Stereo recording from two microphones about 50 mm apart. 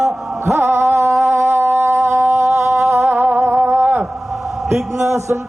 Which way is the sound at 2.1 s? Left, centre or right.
Right.